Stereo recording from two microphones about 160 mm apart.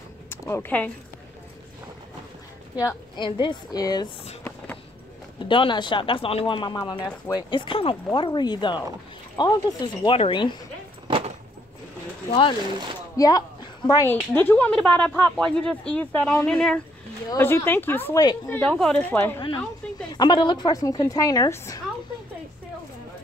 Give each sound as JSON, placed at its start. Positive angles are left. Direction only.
{"t": 0.3, "sound": "speech", "side_deg": 15}
{"t": 2.8, "sound": "a woman's voice", "side_deg": 30}
{"t": 5.4, "sound": "a woman's voice", "side_deg": 30}
{"t": 11.1, "sound": "a sound", "side_deg": -35}
{"t": 12.3, "sound": "a woman's voice", "side_deg": 30}
{"t": 17.3, "sound": "a woman's voice", "side_deg": 15}
{"t": 20.1, "sound": "a woman's voice", "side_deg": 30}